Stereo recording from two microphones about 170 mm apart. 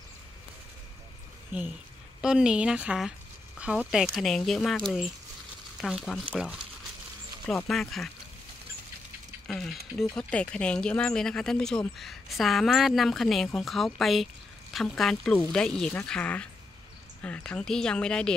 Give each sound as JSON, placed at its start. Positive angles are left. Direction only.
{"t": 1.5, "sound": "speech", "side_deg": -10}
{"t": 7.4, "sound": "speech", "side_deg": 5}
{"t": 9.5, "sound": "speech", "side_deg": 0}